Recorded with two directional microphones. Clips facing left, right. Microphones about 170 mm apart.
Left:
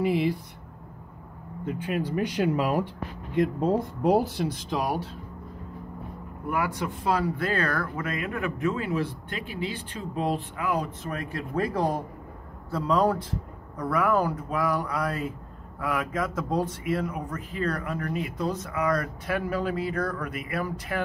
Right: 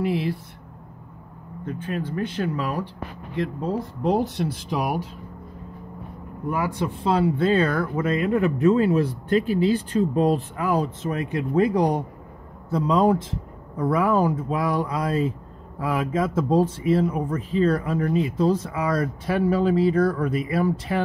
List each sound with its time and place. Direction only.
0.0 s speech: centre (ahead or behind)
1.7 s speech: 10° left (ahead or behind)
4.0 s speech: 5° left (ahead or behind)
6.5 s speech: 30° right (ahead or behind)
11.0 s speech: 20° right (ahead or behind)